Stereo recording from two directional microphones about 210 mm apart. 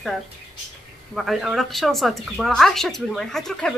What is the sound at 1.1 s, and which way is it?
A woman's voice, centre (ahead or behind).